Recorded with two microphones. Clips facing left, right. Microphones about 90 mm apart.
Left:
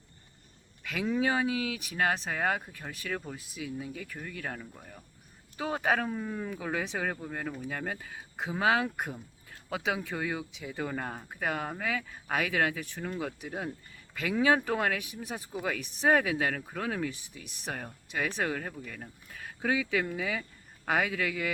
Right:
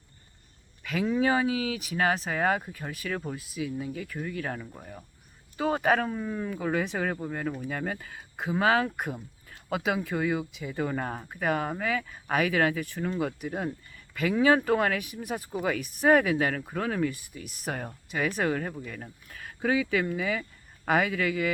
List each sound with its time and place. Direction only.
0.9 s speech: centre (ahead or behind)
4.7 s speech: 20° right (ahead or behind)
5.5 s speech: centre (ahead or behind)